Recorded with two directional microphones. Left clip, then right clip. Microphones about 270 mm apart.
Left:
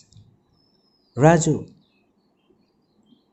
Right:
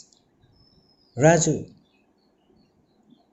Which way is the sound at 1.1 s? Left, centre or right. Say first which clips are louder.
Left 1 dB; left.